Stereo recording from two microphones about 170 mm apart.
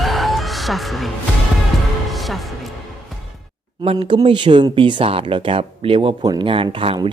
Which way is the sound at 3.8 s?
30° right (ahead or behind).